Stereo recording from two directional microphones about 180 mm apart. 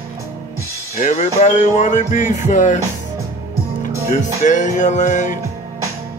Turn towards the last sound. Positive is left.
turn(degrees=45)  # may be behind; listen again after turning